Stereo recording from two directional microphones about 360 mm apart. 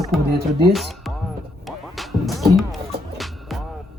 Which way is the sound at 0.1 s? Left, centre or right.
Centre.